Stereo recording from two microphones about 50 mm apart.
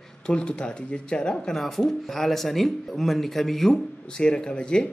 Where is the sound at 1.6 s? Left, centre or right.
Centre.